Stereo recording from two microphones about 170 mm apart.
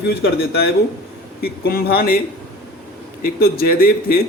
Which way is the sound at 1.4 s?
65° left (ahead or behind).